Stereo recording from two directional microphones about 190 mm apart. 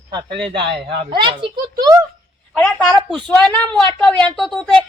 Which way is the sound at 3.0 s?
5° left (ahead or behind).